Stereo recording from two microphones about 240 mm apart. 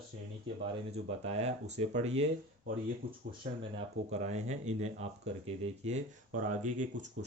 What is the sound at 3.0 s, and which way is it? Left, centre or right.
Speech, right.